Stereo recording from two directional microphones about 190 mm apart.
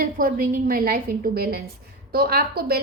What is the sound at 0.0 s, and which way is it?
A woman's voice, 50° right (ahead or behind).